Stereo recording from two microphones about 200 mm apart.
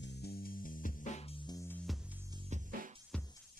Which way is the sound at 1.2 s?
20° left (ahead or behind).